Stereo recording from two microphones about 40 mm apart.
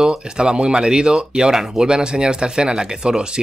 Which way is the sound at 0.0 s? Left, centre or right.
Centre.